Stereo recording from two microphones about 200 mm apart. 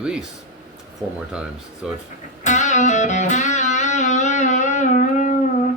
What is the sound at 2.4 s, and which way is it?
Music, 35° left (ahead or behind).